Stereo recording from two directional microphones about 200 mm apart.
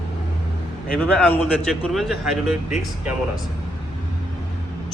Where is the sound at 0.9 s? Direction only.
10° left (ahead or behind).